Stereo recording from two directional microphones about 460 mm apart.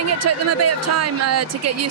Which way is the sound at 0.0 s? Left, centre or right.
Right.